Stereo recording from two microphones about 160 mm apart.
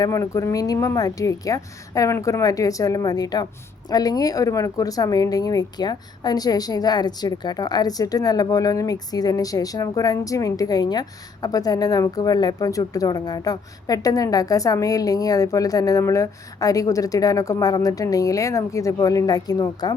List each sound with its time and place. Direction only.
0.0 s speech: 20° left (ahead or behind)